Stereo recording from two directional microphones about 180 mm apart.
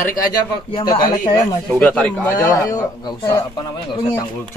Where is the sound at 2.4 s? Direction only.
20° left (ahead or behind).